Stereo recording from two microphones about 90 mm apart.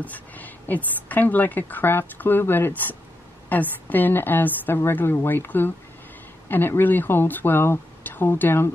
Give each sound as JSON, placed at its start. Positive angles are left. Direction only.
{"t": 0.0, "sound": "a woman's voice", "side_deg": 20}